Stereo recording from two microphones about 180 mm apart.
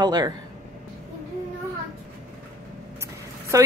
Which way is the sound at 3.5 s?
15° right (ahead or behind).